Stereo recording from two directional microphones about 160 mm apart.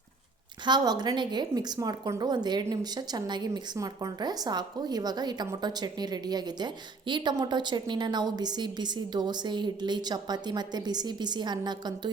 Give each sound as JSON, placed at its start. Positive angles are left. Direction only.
{"t": 0.6, "sound": "a woman's voice", "side_deg": -25}